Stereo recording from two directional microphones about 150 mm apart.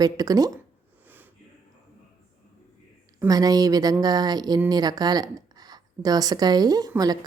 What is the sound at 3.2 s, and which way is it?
A woman's voice, 25° right (ahead or behind).